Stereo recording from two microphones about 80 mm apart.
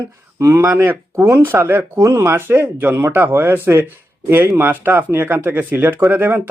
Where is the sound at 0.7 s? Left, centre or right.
Right.